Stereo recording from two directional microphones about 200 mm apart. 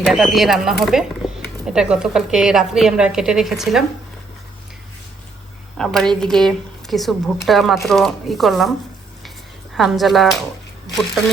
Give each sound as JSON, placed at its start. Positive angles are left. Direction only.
{"t": 0.0, "sound": "a woman's voice", "side_deg": 0}
{"t": 1.2, "sound": "a sound", "side_deg": 0}
{"t": 1.6, "sound": "a woman's voice", "side_deg": -5}
{"t": 5.7, "sound": "a woman's voice", "side_deg": 0}
{"t": 9.7, "sound": "a woman's voice", "side_deg": 0}